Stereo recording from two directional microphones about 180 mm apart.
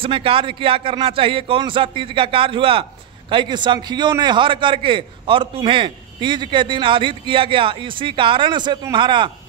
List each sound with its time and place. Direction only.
0.0 s a man's voice: 30° right (ahead or behind)